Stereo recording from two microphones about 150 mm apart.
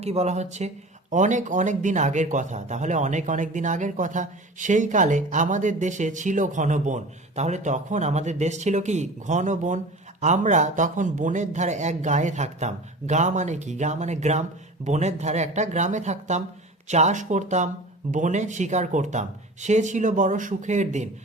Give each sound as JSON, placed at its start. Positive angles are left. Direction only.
{"t": 0.0, "sound": "speech", "side_deg": -45}